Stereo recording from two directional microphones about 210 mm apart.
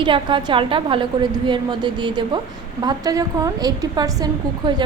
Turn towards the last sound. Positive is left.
turn(degrees=-20)  # may be behind; listen again after turning